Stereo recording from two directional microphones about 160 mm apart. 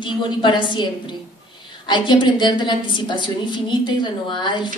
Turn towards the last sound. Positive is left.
turn(degrees=30)  # may be behind; listen again after turning